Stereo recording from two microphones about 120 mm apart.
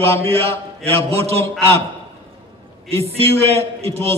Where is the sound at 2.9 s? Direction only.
55° right (ahead or behind).